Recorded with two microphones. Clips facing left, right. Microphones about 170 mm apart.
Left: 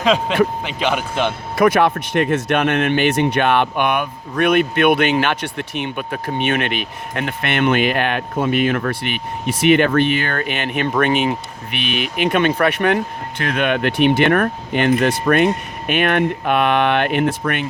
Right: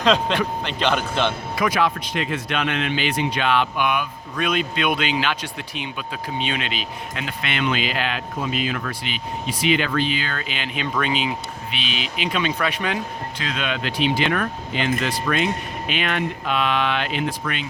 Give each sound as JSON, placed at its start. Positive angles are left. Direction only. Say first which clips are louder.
{"t": 0.0, "sound": "speech", "louder": "left 3 dB", "side_deg": 10}
{"t": 1.5, "sound": "speech", "louder": "left 9 dB", "side_deg": 55}